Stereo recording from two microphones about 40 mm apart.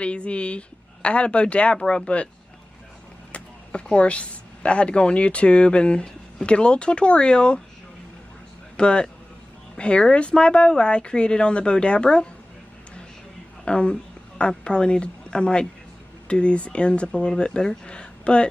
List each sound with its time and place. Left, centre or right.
0.0 s speech: left
3.3 s speech: left
8.7 s speech: left
13.7 s speech: left